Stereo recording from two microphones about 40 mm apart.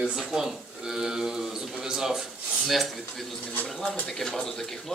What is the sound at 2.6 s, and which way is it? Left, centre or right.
Speech, centre.